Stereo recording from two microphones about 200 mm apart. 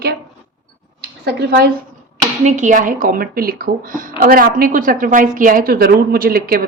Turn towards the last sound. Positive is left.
turn(degrees=-45)  # may be behind; listen again after turning